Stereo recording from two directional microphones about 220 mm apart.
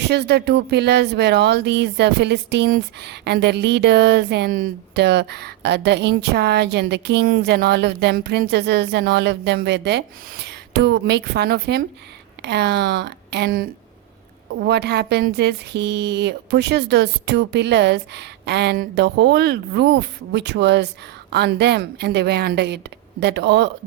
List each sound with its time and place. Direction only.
0.0 s speech: 50° right (ahead or behind)